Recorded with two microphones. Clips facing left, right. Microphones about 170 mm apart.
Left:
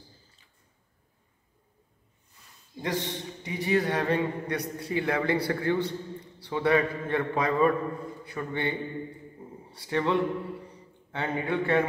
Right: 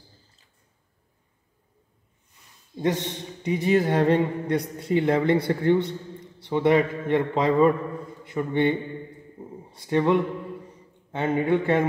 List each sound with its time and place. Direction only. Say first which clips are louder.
2.8 s speech: right 5 dB; 20° right (ahead or behind)